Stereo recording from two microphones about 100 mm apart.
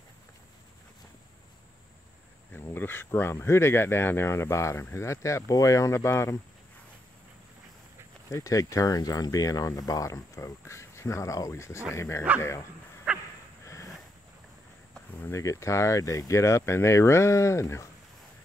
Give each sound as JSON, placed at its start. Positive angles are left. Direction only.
{"t": 2.6, "sound": "speech", "side_deg": 20}
{"t": 8.3, "sound": "speech", "side_deg": 35}
{"t": 13.1, "sound": "a sound", "side_deg": -10}
{"t": 15.1, "sound": "speech", "side_deg": 25}